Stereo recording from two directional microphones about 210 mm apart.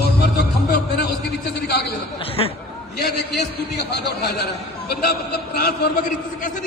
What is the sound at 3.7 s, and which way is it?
A man's voice, 50° left (ahead or behind).